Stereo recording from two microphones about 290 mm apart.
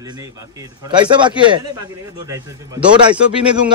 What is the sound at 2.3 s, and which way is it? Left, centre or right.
Speech, centre.